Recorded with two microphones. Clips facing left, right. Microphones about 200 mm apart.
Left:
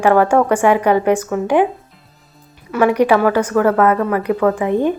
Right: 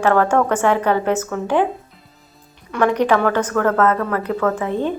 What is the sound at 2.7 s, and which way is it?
Speech, 10° left (ahead or behind).